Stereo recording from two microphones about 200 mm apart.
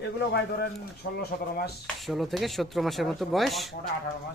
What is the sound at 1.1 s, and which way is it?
Speech, 50° left (ahead or behind).